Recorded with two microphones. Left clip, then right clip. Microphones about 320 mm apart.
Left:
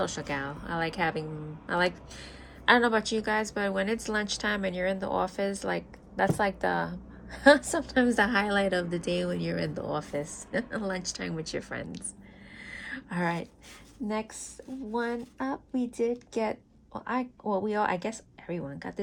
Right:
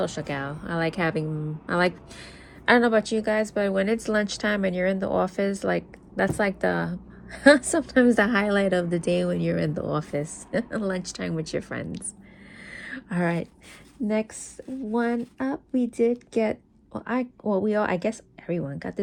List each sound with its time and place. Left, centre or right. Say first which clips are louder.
0.0 s a woman's voice: right 3 dB; centre
2.6 s a woman's voice: right 3 dB; right
2.9 s a woman's voice: right 5 dB; centre
12.6 s a sound: right 2 dB; centre
14.8 s a woman's voice: right 5 dB; centre